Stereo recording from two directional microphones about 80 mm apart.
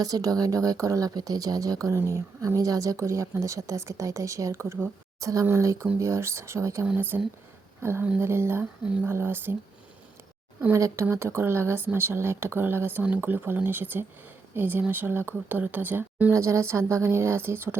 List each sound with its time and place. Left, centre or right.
0.0 s a woman's voice: right
6.8 s a woman's voice: right
8.8 s speech: centre
9.0 s speech: right
10.8 s a woman's voice: right
16.3 s a woman's voice: right